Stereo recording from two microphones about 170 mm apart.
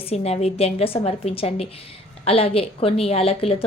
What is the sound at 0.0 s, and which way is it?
A woman's voice, 40° left (ahead or behind).